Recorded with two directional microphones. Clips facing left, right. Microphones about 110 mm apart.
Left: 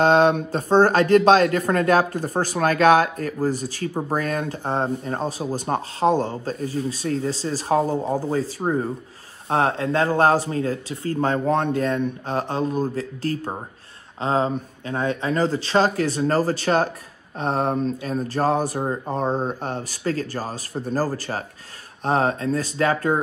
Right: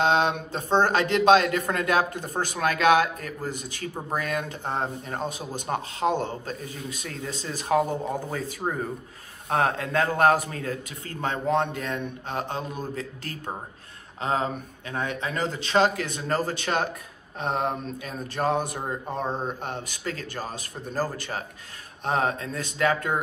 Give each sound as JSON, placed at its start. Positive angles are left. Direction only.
{"t": 0.0, "sound": "speech", "side_deg": 45}